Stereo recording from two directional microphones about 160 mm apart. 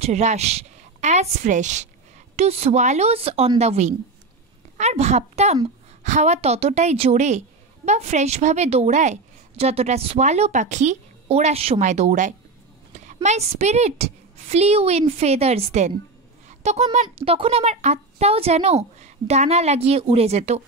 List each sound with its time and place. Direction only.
0.0 s a woman's voice: 45° right (ahead or behind)